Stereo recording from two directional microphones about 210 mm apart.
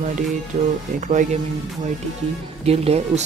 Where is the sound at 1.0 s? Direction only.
35° right (ahead or behind).